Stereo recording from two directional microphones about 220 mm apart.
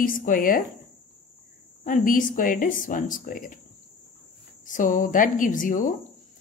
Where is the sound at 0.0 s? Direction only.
40° left (ahead or behind).